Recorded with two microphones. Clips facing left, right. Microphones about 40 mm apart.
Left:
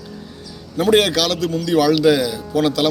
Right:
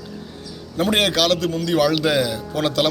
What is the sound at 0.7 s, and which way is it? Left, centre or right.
A man's voice, right.